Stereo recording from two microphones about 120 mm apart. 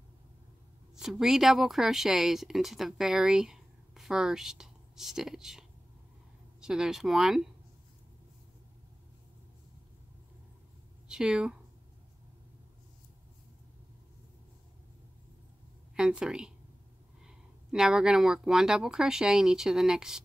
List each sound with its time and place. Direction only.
0.9 s speech: 5° right (ahead or behind)
11.1 s speech: 5° right (ahead or behind)
16.0 s speech: 5° right (ahead or behind)
17.6 s speech: 5° right (ahead or behind)